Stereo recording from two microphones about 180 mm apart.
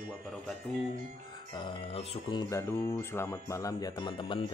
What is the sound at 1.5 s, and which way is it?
Speech, 30° left (ahead or behind).